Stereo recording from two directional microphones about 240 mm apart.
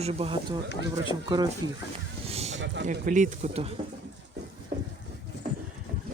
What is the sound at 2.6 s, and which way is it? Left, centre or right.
Speech, right.